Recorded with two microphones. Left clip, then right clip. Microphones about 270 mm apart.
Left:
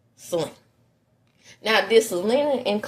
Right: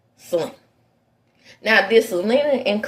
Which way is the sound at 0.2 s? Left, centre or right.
Left.